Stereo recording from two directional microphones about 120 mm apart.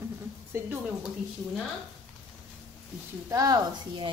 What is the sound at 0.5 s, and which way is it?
Speech, 20° right (ahead or behind).